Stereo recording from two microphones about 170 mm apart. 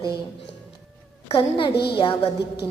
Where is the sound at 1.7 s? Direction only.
70° left (ahead or behind).